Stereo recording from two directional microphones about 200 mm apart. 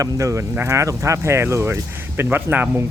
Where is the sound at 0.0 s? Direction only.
15° right (ahead or behind).